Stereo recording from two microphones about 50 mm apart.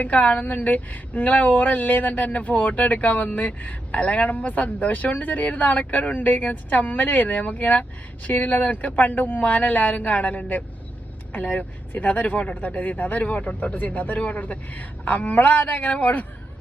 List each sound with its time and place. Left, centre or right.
0.0 s speech: left
8.3 s speech: left